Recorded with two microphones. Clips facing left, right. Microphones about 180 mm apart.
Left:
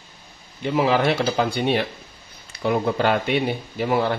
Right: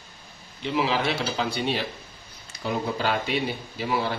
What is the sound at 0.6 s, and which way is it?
Speech, 50° left (ahead or behind).